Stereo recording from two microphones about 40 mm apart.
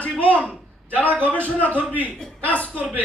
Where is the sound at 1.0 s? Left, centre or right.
Left.